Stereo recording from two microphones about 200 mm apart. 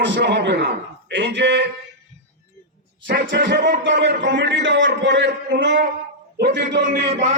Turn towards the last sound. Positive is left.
turn(degrees=-35)  # may be behind; listen again after turning